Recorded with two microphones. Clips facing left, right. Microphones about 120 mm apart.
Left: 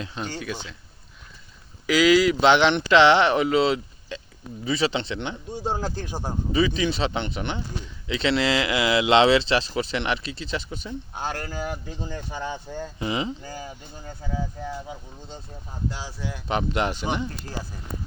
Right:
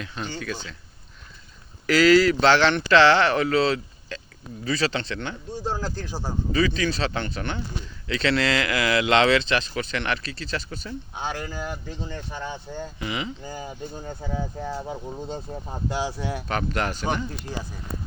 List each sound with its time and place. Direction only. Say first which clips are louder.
0.0 s speech: left 1 dB; 25° left (ahead or behind)
1.9 s speech: right 1 dB; 10° left (ahead or behind)
11.1 s speech: even; centre (ahead or behind)
13.0 s speech: left 4 dB; 30° left (ahead or behind)
13.4 s speech: right 3 dB; 20° right (ahead or behind); by 15.8 s 50° right (ahead or behind)
15.9 s speech: right 10 dB; 85° right
16.5 s speech: left 4 dB; 20° left (ahead or behind)